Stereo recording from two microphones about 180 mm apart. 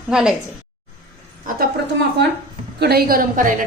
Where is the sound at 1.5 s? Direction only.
70° right (ahead or behind); by 3.5 s 50° right (ahead or behind).